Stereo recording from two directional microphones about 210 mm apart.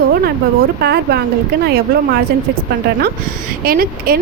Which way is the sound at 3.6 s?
45° right (ahead or behind).